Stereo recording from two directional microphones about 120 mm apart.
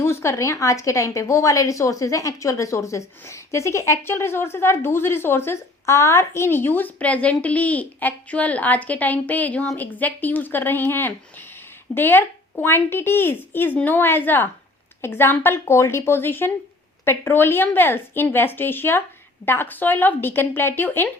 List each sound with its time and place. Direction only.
0.0 s a woman's voice: 20° left (ahead or behind)